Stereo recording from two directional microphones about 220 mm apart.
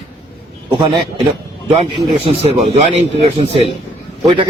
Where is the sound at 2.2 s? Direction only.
30° right (ahead or behind).